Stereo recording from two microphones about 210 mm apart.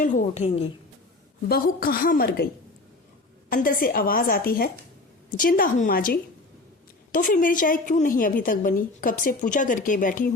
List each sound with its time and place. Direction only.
0.0 s a woman's voice: 35° left (ahead or behind)
1.5 s a woman's voice: 45° left (ahead or behind)
3.5 s a woman's voice: 40° left (ahead or behind)